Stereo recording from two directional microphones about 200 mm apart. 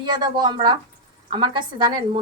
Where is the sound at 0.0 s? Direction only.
20° right (ahead or behind).